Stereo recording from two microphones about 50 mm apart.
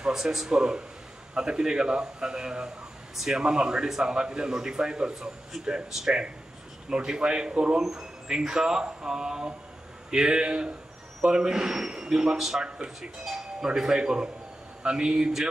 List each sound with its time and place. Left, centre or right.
0.0 s speech: centre
5.9 s speech: centre
12.6 s speech: centre
13.2 s music: centre
13.7 s speech: centre